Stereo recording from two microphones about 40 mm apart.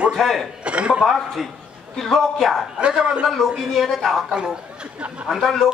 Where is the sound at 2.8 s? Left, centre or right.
Centre.